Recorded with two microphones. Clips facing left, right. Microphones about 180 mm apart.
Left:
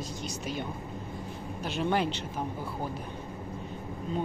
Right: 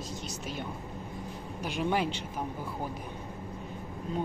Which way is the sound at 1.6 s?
10° right (ahead or behind).